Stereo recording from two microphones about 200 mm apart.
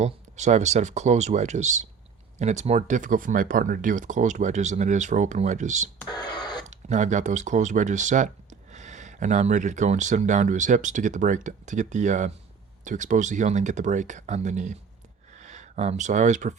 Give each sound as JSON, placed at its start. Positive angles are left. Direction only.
{"t": 0.0, "sound": "speech", "side_deg": -35}
{"t": 6.1, "sound": "a sound", "side_deg": 20}
{"t": 6.7, "sound": "speech", "side_deg": -35}